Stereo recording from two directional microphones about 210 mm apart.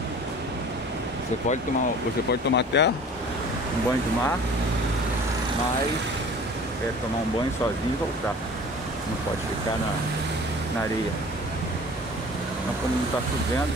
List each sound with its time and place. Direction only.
2.5 s speech: 55° left (ahead or behind)